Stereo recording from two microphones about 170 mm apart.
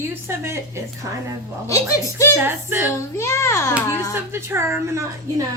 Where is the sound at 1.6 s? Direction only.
15° left (ahead or behind).